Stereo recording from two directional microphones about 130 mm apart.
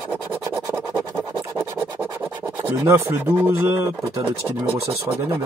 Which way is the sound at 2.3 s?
15° right (ahead or behind).